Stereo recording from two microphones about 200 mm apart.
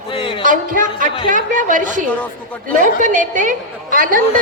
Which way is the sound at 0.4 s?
40° right (ahead or behind).